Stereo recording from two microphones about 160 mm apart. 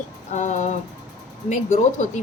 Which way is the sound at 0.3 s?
50° left (ahead or behind).